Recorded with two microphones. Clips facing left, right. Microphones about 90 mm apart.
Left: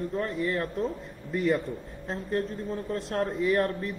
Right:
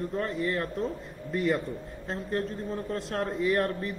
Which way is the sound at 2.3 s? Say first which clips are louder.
Left 1 dB; 40° right (ahead or behind).